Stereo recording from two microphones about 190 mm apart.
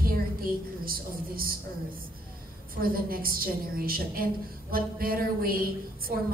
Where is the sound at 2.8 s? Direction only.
50° right (ahead or behind).